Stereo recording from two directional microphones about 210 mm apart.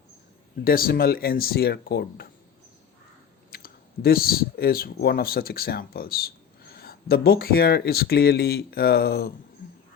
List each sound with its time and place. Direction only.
0.6 s speech: 45° left (ahead or behind)
3.5 s speech: 45° left (ahead or behind)